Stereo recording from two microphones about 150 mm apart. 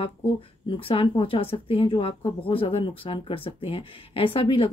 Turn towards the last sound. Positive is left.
turn(degrees=35)  # may be behind; listen again after turning